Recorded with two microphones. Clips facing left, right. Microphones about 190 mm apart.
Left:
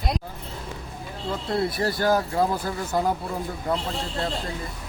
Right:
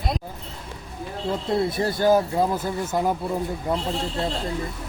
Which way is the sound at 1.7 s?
20° right (ahead or behind).